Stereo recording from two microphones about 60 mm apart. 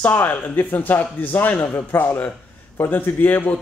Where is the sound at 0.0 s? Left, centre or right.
Left.